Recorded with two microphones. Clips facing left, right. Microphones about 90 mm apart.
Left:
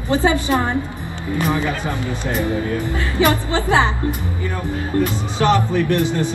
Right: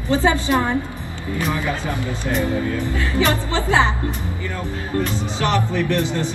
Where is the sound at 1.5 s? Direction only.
20° left (ahead or behind).